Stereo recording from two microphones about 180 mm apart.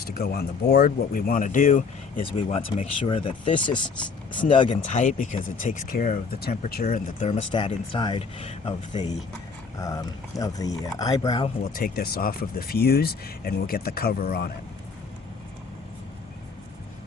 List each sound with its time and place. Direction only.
0.0 s speech: 60° left (ahead or behind)
2.1 s speech: 30° left (ahead or behind)
4.9 s speech: 45° left (ahead or behind)
6.8 s speech: 40° left (ahead or behind)
7.5 s speech: 25° left (ahead or behind)
11.6 s speech: 55° left (ahead or behind)